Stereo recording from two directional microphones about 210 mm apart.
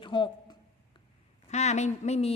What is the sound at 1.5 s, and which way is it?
Speech, 35° left (ahead or behind).